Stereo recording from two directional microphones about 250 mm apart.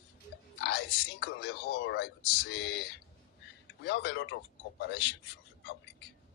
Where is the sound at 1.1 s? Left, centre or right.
Left.